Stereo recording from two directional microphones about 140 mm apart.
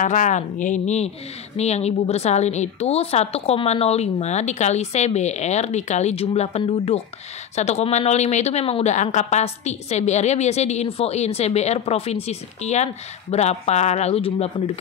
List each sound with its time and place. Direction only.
0.0 s a woman's voice: 60° left (ahead or behind)